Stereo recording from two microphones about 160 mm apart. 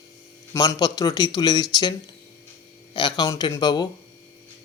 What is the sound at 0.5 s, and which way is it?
A man's voice, 20° left (ahead or behind).